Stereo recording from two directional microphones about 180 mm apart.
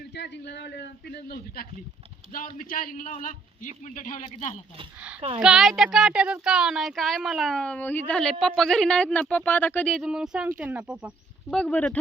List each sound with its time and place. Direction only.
0.0 s a man's voice: 70° left (ahead or behind)
2.3 s a man's voice: 50° left (ahead or behind)
4.9 s speech: 5° right (ahead or behind)
11.5 s speech: 5° left (ahead or behind)